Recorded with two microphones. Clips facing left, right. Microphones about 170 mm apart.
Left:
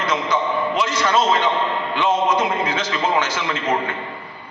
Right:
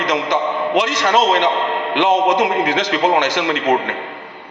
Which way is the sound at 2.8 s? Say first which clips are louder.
Right 5 dB; 70° right (ahead or behind).